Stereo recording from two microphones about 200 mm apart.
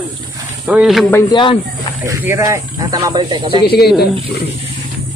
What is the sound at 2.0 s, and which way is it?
Speech, 10° right (ahead or behind).